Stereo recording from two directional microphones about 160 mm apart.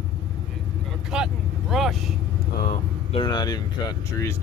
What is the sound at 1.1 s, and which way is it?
Speech, 5° right (ahead or behind).